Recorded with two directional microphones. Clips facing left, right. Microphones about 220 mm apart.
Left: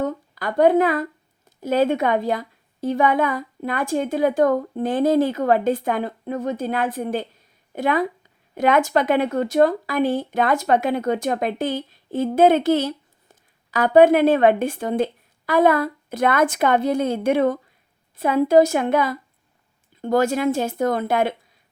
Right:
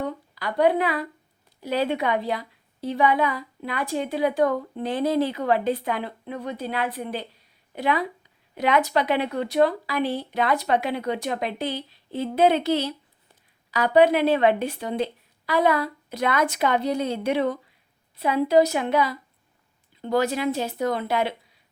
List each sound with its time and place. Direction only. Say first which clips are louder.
0.0 s a woman's voice: left 5 dB; 45° left (ahead or behind)